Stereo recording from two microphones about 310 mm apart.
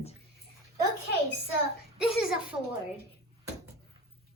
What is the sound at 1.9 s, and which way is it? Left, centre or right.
Speech, centre.